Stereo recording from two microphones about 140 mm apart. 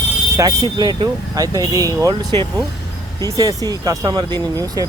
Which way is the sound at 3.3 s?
25° right (ahead or behind).